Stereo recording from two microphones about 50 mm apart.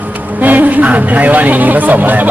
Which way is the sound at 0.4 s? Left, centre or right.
Right.